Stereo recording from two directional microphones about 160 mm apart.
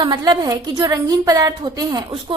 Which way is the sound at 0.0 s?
25° right (ahead or behind).